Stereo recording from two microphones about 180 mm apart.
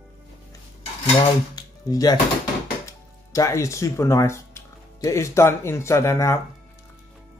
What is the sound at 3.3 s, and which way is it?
Speech, 15° left (ahead or behind).